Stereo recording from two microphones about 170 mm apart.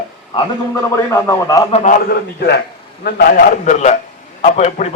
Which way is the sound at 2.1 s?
65° left (ahead or behind).